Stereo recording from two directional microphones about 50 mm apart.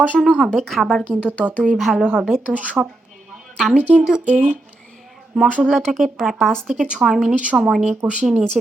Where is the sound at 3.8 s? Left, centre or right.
Right.